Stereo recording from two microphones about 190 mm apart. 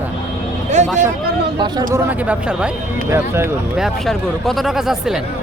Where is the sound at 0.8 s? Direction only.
40° right (ahead or behind).